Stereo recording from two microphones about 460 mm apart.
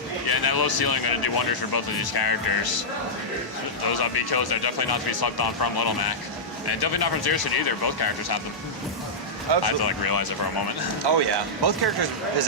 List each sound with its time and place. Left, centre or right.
0.3 s speech: left
3.8 s speech: left
9.6 s speech: left
11.1 s speech: right